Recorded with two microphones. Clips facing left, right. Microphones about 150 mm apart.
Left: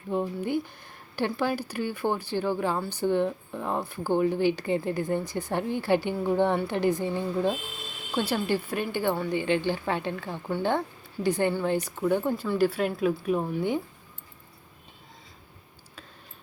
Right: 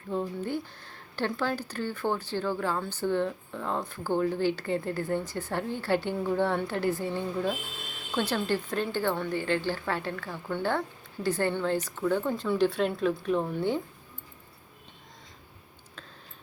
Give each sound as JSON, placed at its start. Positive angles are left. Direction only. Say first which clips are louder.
{"t": 0.1, "sound": "speech", "louder": "left 3 dB", "side_deg": 15}
{"t": 12.3, "sound": "speech", "louder": "left 1 dB", "side_deg": 5}